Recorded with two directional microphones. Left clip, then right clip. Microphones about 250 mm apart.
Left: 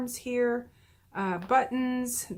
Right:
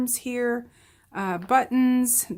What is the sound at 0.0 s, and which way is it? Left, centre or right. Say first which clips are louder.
Speech: right 2 dB; right.